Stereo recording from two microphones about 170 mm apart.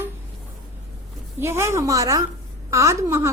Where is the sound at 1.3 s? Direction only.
15° right (ahead or behind).